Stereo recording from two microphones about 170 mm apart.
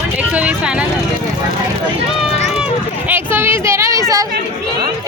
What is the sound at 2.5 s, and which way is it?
Speech, 10° right (ahead or behind).